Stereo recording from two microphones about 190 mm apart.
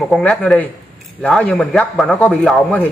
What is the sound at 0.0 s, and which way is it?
Speech, centre (ahead or behind).